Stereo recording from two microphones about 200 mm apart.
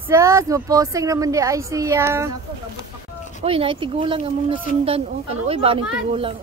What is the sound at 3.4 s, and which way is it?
A woman's voice, 30° right (ahead or behind).